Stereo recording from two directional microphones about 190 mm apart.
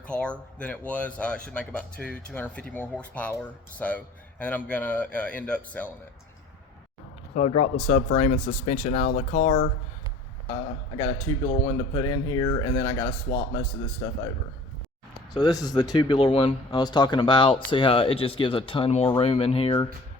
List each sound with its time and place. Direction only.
0.1 s speech: 5° left (ahead or behind)
7.3 s speech: 35° left (ahead or behind)
10.5 s speech: 20° left (ahead or behind)
15.3 s speech: 20° left (ahead or behind)